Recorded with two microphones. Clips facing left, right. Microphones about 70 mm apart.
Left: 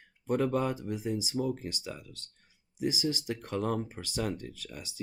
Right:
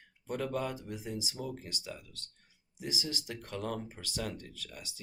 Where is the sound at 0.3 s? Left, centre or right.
Left.